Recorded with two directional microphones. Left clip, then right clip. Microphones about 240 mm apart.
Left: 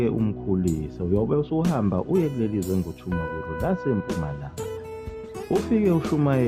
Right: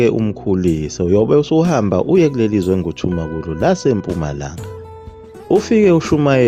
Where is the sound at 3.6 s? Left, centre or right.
Right.